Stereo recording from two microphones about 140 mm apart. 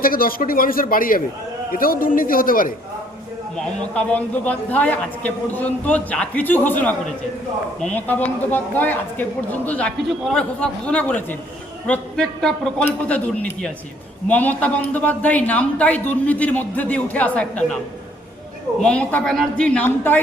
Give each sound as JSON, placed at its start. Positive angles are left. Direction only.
{"t": 0.0, "sound": "speech", "side_deg": 90}
{"t": 3.9, "sound": "a man's voice", "side_deg": 10}
{"t": 11.9, "sound": "a sound", "side_deg": 5}
{"t": 12.8, "sound": "a man's voice", "side_deg": 10}
{"t": 18.8, "sound": "a man's voice", "side_deg": 5}